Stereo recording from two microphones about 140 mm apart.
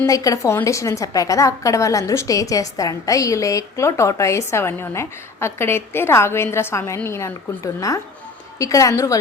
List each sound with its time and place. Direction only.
0.0 s a woman's voice: 25° left (ahead or behind)